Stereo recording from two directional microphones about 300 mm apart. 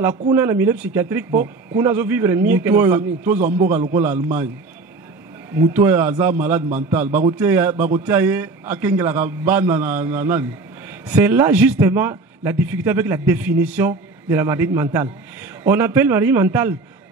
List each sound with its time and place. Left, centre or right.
0.3 s a man's voice: centre
3.3 s a man's voice: right
3.9 s a man's voice: centre
5.5 s a man's voice: centre